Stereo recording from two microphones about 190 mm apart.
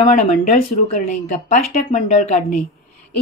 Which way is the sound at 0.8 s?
40° left (ahead or behind).